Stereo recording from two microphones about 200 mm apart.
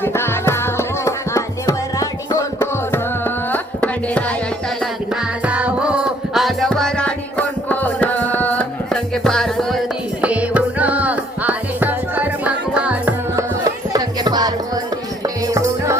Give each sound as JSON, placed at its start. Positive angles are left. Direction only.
{"t": 0.0, "sound": "music", "side_deg": 10}
{"t": 5.5, "sound": "music", "side_deg": -5}